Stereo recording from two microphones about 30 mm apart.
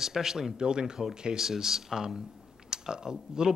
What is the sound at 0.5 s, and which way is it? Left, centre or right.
Speech, right.